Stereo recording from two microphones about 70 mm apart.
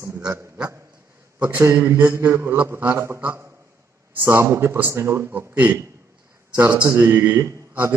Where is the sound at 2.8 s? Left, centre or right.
Right.